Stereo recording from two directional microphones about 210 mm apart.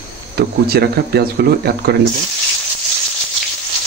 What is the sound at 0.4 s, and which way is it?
Speech, 50° right (ahead or behind).